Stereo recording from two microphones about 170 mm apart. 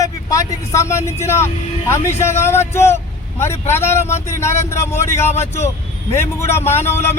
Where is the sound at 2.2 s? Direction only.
15° left (ahead or behind).